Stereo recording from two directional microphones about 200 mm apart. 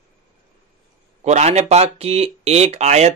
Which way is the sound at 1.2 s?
35° right (ahead or behind).